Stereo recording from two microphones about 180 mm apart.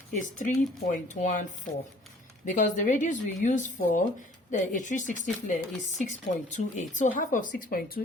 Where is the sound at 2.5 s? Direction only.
45° left (ahead or behind).